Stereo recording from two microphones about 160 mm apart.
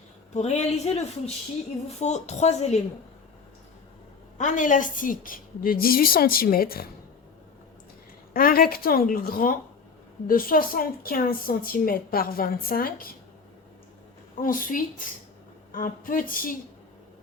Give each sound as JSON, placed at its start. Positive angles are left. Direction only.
{"t": 0.3, "sound": "a woman's voice", "side_deg": 45}
{"t": 4.4, "sound": "a woman's voice", "side_deg": 50}
{"t": 8.3, "sound": "a woman's voice", "side_deg": 65}
{"t": 14.4, "sound": "a woman's voice", "side_deg": 60}